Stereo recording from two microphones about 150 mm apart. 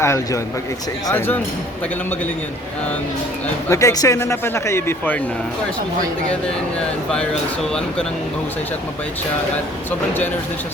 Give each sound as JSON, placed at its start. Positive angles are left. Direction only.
{"t": 0.0, "sound": "speech", "side_deg": 20}
{"t": 3.7, "sound": "speech", "side_deg": 20}